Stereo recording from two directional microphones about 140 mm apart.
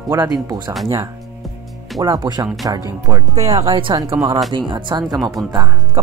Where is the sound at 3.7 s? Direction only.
35° right (ahead or behind).